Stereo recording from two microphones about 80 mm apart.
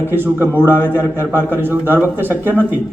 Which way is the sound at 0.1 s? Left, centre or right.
Right.